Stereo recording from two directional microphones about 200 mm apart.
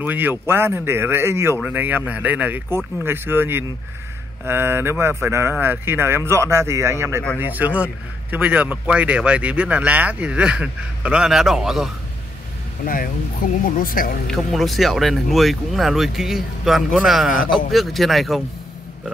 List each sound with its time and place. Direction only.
0.0 s speech: 10° right (ahead or behind)
12.8 s speech: 45° left (ahead or behind)
14.2 s speech: centre (ahead or behind)